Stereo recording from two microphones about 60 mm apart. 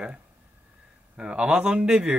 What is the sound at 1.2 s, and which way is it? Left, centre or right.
A man's voice, centre.